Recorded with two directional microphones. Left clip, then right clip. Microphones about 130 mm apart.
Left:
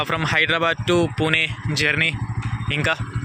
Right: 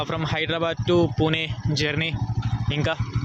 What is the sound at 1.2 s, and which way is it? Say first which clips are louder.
Speech: left 4 dB; 25° right (ahead or behind).